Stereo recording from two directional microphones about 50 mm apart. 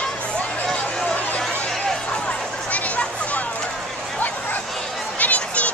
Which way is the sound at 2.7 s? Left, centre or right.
Left.